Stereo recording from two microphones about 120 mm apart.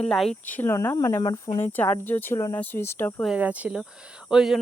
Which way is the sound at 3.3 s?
10° right (ahead or behind).